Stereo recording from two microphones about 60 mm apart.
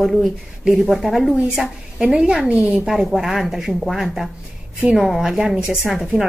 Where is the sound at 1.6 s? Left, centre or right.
Centre.